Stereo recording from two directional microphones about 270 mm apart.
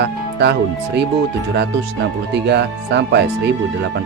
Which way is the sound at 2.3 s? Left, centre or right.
Right.